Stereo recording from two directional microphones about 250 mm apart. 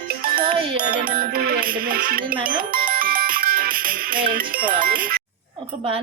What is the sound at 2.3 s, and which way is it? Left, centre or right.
Speech, centre.